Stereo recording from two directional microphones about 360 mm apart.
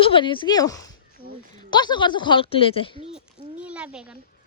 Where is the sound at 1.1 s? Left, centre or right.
Right.